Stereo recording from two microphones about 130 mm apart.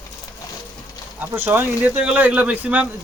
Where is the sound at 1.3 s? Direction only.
20° right (ahead or behind).